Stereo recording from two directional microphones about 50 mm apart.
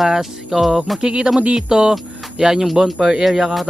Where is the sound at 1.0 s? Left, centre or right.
Centre.